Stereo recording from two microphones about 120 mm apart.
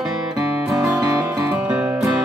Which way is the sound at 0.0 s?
5° right (ahead or behind).